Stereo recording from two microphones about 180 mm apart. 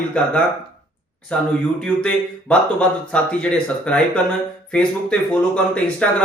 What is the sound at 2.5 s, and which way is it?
Speech, 5° left (ahead or behind).